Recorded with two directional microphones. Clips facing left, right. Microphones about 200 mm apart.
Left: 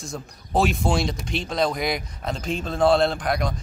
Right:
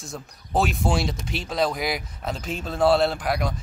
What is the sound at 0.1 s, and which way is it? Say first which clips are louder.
Speech: left 1 dB; centre (ahead or behind).